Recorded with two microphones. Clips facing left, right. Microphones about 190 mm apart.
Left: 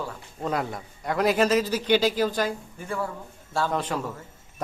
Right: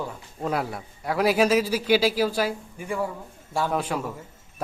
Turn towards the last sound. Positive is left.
turn(degrees=-10)  # may be behind; listen again after turning